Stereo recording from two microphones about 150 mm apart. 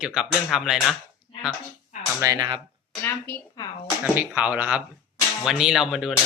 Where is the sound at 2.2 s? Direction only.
25° right (ahead or behind).